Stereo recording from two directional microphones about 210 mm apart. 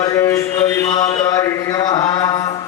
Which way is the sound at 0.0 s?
15° left (ahead or behind).